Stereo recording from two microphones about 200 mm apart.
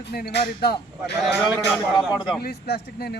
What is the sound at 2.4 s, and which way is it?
Speech, 50° left (ahead or behind).